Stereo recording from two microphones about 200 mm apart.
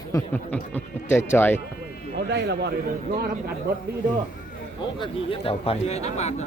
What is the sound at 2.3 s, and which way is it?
Speech, 55° right (ahead or behind).